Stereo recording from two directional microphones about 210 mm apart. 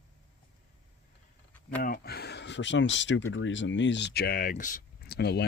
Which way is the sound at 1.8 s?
45° left (ahead or behind).